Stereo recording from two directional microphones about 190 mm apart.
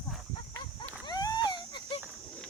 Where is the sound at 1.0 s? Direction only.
20° left (ahead or behind).